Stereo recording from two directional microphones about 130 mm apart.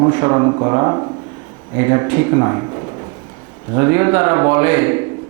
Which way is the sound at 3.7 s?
25° right (ahead or behind).